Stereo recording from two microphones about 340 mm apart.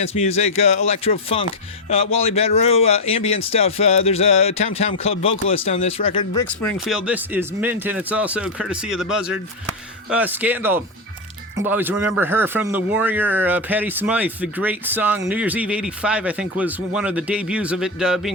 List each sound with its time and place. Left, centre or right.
0.0 s speech: centre